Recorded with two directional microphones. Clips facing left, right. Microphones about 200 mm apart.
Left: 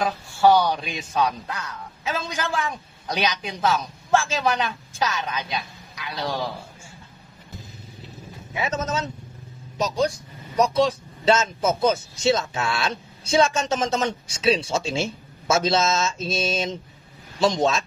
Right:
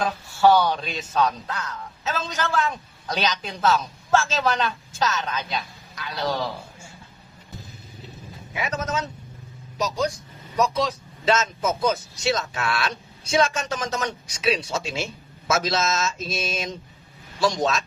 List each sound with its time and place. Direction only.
0.0 s a man's voice: 15° left (ahead or behind)
8.5 s speech: 25° left (ahead or behind)
10.5 s speech: 30° left (ahead or behind)